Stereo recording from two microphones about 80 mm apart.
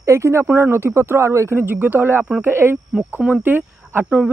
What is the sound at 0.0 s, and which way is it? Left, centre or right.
Speech, right.